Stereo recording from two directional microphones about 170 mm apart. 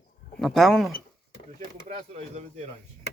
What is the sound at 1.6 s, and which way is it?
Speech, 45° right (ahead or behind).